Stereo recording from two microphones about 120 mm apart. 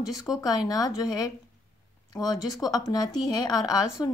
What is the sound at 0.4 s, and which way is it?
A woman's voice, 30° left (ahead or behind).